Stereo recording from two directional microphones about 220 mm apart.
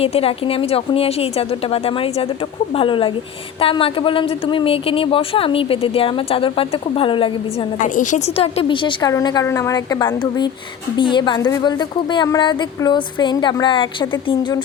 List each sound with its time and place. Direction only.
0.0 s speech: 25° left (ahead or behind)
7.8 s speech: 35° left (ahead or behind)